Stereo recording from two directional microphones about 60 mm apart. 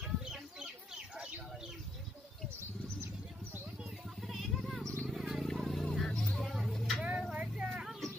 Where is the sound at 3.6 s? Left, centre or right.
Centre.